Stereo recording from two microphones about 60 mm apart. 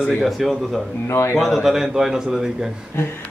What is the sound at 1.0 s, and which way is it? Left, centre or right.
Speech, left.